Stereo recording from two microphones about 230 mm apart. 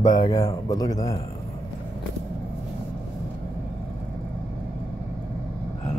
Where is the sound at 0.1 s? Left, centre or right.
Centre.